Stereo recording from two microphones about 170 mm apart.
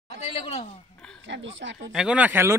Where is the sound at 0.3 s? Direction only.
35° left (ahead or behind).